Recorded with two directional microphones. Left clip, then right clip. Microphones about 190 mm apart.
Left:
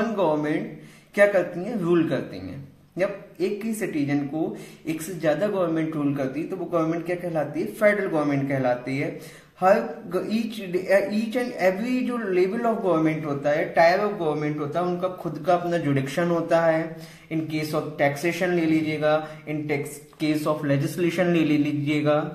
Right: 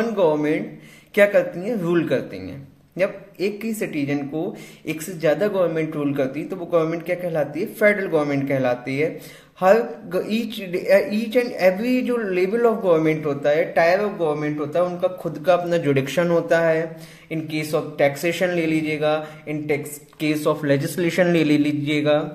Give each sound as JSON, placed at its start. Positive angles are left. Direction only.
{"t": 0.0, "sound": "a sound", "side_deg": -40}
{"t": 1.1, "sound": "a man's voice", "side_deg": -45}
{"t": 4.8, "sound": "a man's voice", "side_deg": -45}
{"t": 10.1, "sound": "a man's voice", "side_deg": -50}